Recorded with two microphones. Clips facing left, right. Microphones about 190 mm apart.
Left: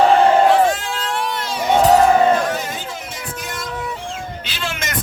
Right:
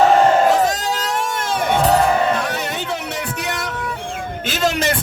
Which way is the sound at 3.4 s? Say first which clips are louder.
Right 4 dB; 70° right (ahead or behind).